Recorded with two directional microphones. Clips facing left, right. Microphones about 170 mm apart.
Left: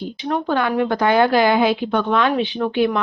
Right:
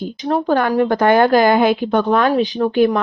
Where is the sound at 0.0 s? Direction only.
40° right (ahead or behind).